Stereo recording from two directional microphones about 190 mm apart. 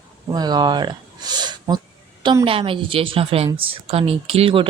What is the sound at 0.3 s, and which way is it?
Speech, 20° right (ahead or behind).